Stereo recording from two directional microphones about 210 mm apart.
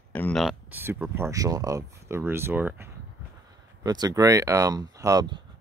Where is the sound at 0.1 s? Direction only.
5° left (ahead or behind); by 5.4 s 20° right (ahead or behind).